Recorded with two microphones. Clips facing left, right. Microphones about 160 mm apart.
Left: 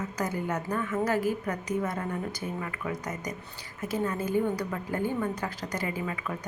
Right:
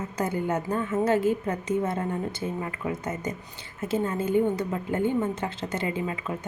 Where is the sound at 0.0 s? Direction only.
30° right (ahead or behind).